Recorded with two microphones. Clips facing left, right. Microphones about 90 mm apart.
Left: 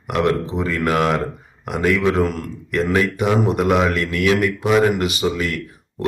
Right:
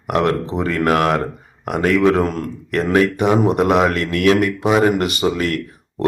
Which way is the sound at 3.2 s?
20° right (ahead or behind).